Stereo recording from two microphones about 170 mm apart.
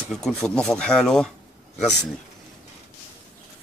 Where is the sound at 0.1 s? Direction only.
5° left (ahead or behind).